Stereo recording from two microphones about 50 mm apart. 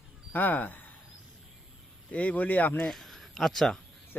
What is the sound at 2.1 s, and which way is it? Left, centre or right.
Speech, left.